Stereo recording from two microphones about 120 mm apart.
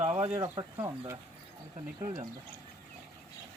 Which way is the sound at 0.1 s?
15° right (ahead or behind).